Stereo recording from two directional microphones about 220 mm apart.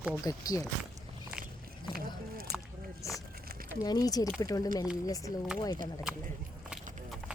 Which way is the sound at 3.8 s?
15° left (ahead or behind).